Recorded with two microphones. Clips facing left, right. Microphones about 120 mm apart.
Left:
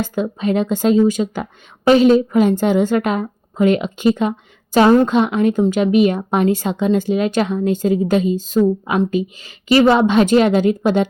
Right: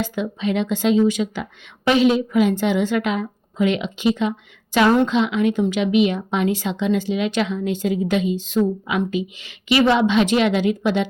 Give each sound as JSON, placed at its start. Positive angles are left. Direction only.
{"t": 0.0, "sound": "a woman's voice", "side_deg": 45}